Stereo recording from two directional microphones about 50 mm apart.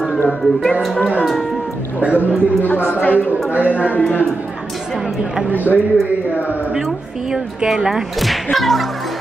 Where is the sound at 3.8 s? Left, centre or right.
Left.